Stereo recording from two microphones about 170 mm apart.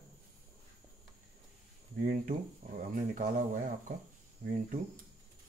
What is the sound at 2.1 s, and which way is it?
Speech, 50° right (ahead or behind).